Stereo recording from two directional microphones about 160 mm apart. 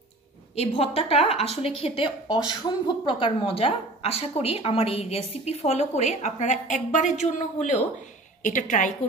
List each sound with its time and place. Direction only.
0.6 s a woman's voice: 40° left (ahead or behind)